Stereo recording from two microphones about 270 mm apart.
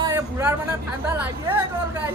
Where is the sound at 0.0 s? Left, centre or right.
Centre.